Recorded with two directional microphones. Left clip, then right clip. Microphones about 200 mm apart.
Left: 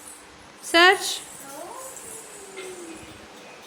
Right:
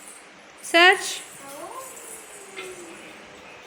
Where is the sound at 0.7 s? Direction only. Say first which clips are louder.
Even; centre (ahead or behind).